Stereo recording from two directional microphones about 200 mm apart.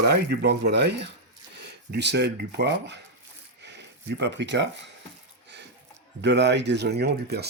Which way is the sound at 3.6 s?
60° right (ahead or behind).